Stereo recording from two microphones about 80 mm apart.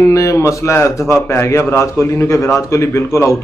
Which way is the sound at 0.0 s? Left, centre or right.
Left.